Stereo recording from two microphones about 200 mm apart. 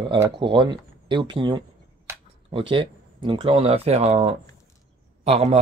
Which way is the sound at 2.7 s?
25° right (ahead or behind).